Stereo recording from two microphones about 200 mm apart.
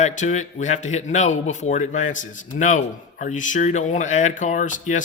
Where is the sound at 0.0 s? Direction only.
35° left (ahead or behind).